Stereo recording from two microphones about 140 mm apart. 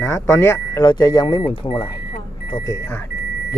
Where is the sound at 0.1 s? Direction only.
20° left (ahead or behind).